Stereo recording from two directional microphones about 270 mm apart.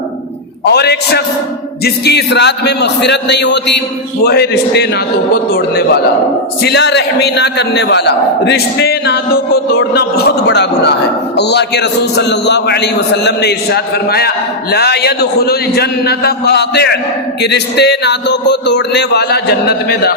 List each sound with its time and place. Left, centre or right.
0.6 s a man's voice: left